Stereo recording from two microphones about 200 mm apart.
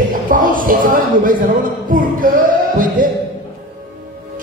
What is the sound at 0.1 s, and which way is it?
Speech, 45° right (ahead or behind).